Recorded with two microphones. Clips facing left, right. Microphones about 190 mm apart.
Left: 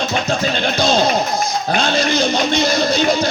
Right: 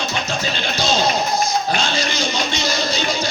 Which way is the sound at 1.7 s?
55° left (ahead or behind).